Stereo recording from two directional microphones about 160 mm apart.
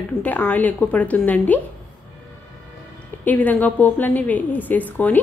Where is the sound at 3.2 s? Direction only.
10° left (ahead or behind).